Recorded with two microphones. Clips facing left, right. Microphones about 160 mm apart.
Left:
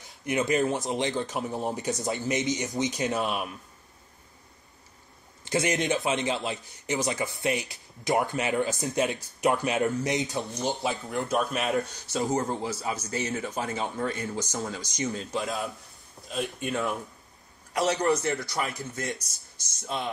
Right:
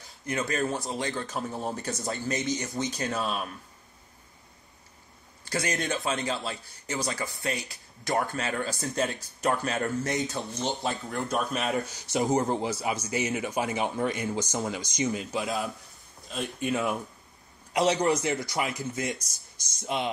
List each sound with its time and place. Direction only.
0.2 s a man's voice: 20° left (ahead or behind)
5.4 s a man's voice: 20° left (ahead or behind)
10.2 s speech: centre (ahead or behind)
12.1 s speech: 20° right (ahead or behind)
15.0 s speech: centre (ahead or behind)
17.7 s speech: 15° right (ahead or behind)
19.9 s speech: 15° right (ahead or behind)